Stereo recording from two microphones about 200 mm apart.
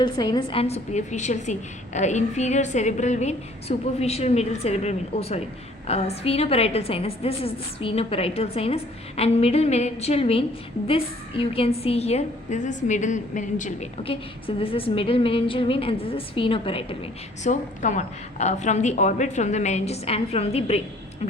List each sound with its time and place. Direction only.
0.0 s a woman's voice: 20° left (ahead or behind)